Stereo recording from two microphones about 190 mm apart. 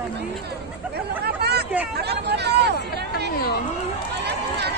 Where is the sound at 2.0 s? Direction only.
60° right (ahead or behind).